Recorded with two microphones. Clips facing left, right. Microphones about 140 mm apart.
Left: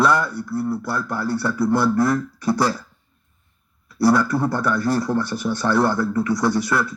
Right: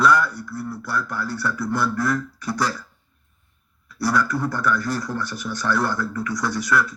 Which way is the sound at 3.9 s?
25° left (ahead or behind).